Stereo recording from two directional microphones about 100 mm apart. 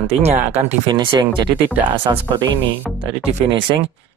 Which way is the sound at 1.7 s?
15° right (ahead or behind).